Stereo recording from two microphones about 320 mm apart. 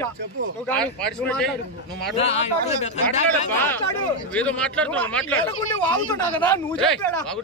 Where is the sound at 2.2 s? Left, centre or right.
Centre.